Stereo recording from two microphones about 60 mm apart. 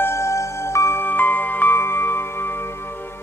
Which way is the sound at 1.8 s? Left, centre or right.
Left.